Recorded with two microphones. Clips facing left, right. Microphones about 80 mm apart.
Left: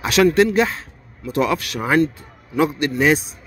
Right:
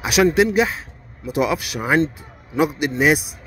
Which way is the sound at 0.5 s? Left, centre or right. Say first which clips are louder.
Even; centre.